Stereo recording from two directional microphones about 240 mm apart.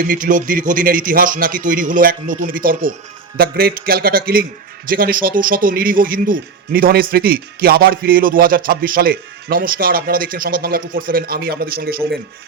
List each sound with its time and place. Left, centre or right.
0.0 s speech: right